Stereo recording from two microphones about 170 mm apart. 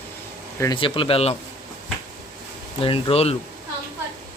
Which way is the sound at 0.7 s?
30° left (ahead or behind).